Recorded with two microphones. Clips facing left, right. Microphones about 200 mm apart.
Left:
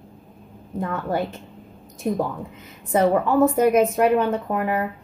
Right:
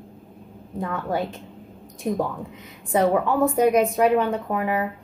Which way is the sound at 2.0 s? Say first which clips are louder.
Left 1 dB; centre (ahead or behind).